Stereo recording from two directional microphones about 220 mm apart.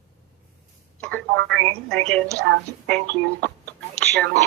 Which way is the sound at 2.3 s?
45° right (ahead or behind).